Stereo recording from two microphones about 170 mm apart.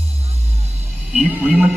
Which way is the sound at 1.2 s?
5° right (ahead or behind).